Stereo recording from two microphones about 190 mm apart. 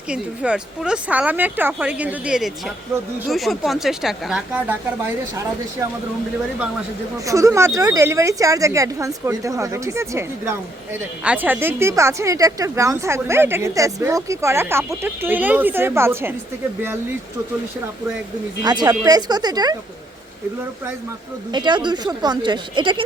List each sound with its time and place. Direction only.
0.1 s a woman's voice: 5° right (ahead or behind)
7.3 s speech: 15° right (ahead or behind)
18.6 s speech: 20° right (ahead or behind)
21.5 s speech: 25° right (ahead or behind)